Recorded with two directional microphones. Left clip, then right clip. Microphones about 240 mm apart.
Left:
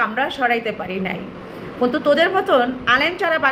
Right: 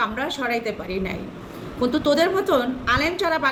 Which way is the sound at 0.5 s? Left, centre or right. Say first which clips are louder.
Left 4 dB; left.